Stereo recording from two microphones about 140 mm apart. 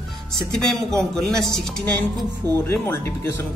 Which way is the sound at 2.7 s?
15° left (ahead or behind).